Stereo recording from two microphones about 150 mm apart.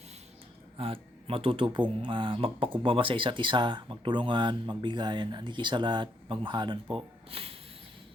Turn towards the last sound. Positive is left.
turn(degrees=-40)  # may be behind; listen again after turning